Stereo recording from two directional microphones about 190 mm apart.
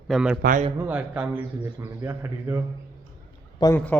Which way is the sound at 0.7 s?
10° right (ahead or behind).